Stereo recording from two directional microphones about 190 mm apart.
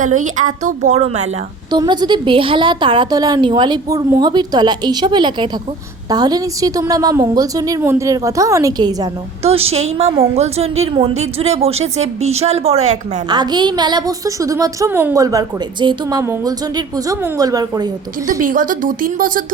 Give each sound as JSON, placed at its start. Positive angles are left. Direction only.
{"t": 0.0, "sound": "a woman's voice", "side_deg": -40}
{"t": 1.7, "sound": "a woman's voice", "side_deg": -20}
{"t": 9.4, "sound": "a woman's voice", "side_deg": -30}
{"t": 13.2, "sound": "a woman's voice", "side_deg": -20}
{"t": 18.3, "sound": "a woman's voice", "side_deg": -45}